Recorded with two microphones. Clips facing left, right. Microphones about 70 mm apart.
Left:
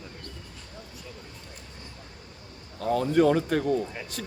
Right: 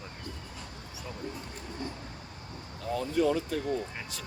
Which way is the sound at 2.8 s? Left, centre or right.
Left.